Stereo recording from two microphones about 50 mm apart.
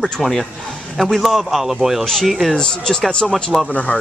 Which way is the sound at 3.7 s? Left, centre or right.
Left.